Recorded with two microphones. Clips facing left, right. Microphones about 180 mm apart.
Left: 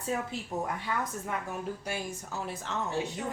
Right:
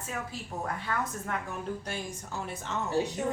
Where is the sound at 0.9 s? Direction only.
15° left (ahead or behind).